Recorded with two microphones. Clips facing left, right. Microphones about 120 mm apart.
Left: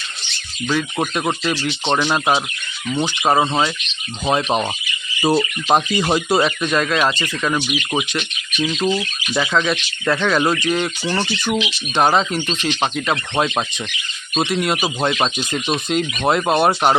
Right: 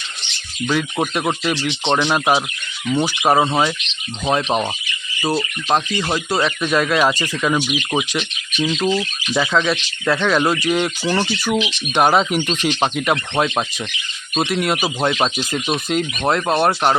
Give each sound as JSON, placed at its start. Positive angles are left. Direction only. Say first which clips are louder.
{"t": 0.7, "sound": "speech", "louder": "even", "side_deg": -5}
{"t": 2.1, "sound": "speech", "louder": "right 1 dB", "side_deg": -10}
{"t": 5.2, "sound": "speech", "louder": "left 4 dB", "side_deg": 20}
{"t": 5.6, "sound": "speech", "louder": "left 1 dB", "side_deg": 10}
{"t": 6.4, "sound": "speech", "louder": "even", "side_deg": -5}
{"t": 9.3, "sound": "speech", "louder": "right 1 dB", "side_deg": 0}
{"t": 13.3, "sound": "speech", "louder": "even", "side_deg": 0}